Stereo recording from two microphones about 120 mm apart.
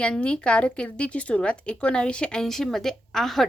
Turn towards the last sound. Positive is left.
turn(degrees=0)  # may be behind; listen again after turning